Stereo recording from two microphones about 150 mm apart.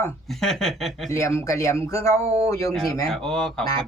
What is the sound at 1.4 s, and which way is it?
Speech, 20° left (ahead or behind).